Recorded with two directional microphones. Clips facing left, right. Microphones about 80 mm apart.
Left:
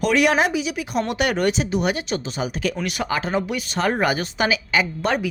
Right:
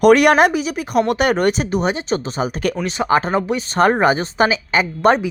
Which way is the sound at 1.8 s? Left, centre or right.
Right.